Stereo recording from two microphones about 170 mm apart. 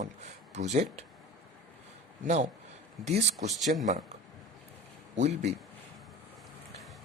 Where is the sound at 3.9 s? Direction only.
40° right (ahead or behind).